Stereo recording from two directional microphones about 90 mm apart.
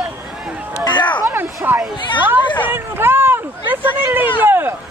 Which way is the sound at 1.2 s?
25° right (ahead or behind).